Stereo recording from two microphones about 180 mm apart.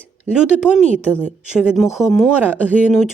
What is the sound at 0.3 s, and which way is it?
Speech, 5° right (ahead or behind).